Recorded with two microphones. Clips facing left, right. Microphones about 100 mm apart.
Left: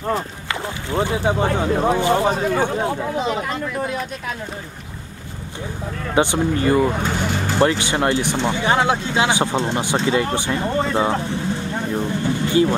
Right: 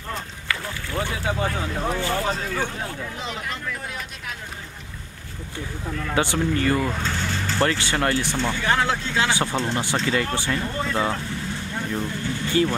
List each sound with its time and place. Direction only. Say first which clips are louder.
0.5 s speech: left 2 dB; 20° left (ahead or behind)
6.1 s speech: left 5 dB; 20° left (ahead or behind)